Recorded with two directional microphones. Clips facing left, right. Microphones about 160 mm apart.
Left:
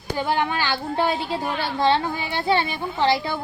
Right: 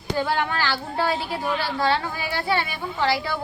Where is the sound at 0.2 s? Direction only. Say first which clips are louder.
Left 1 dB; 20° left (ahead or behind).